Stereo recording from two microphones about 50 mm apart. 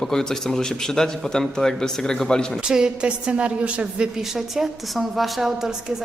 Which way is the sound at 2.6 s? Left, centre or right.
Centre.